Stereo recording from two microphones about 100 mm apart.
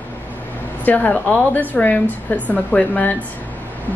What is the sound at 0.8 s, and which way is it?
A woman's voice, 15° left (ahead or behind).